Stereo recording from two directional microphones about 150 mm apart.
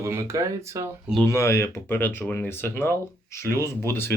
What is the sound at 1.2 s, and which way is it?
Speech, 20° left (ahead or behind).